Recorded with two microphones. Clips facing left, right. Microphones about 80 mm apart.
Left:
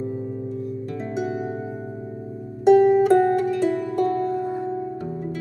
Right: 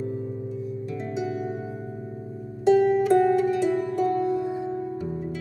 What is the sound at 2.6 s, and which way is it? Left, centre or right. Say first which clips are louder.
Music: left 5 dB; left.